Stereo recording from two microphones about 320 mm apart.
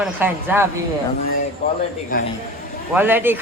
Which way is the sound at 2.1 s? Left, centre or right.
Left.